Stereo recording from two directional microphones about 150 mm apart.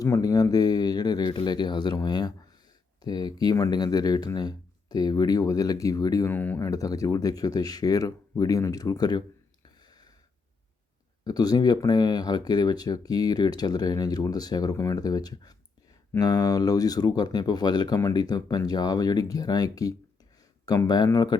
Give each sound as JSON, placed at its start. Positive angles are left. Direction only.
{"t": 0.0, "sound": "speech", "side_deg": 20}
{"t": 9.6, "sound": "a sound", "side_deg": 25}
{"t": 11.2, "sound": "speech", "side_deg": 25}